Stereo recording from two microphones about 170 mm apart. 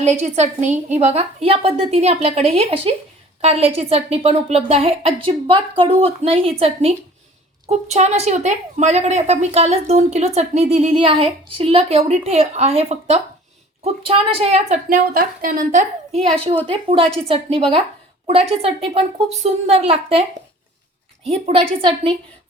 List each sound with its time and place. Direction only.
0.0 s a woman's voice: 40° right (ahead or behind)
16.6 s a woman's voice: 30° right (ahead or behind)
18.3 s a woman's voice: 35° right (ahead or behind)
21.2 s a woman's voice: 35° right (ahead or behind)